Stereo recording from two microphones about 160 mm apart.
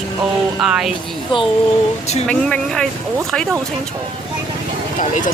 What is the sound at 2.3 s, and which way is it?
Speech, 5° left (ahead or behind).